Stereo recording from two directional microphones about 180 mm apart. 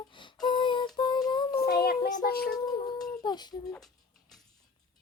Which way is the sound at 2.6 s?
20° left (ahead or behind).